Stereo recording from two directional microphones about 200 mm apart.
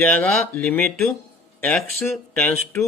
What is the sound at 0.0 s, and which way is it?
Speech, 10° left (ahead or behind).